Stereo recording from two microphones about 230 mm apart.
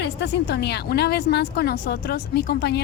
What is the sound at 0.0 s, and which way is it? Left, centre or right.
A woman's voice, left.